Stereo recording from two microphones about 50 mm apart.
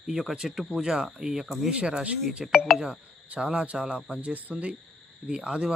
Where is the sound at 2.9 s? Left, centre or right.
Centre.